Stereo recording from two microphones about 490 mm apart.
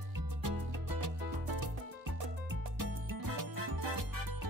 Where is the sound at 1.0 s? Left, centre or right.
Right.